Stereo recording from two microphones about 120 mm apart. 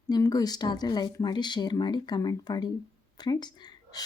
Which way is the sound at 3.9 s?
30° left (ahead or behind).